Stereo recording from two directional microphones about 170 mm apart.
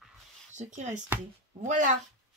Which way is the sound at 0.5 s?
45° right (ahead or behind).